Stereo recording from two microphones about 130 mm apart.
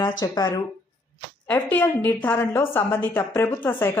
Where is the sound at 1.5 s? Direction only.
15° left (ahead or behind).